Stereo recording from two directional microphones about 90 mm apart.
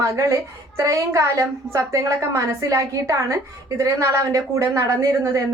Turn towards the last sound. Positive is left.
turn(degrees=-35)  # may be behind; listen again after turning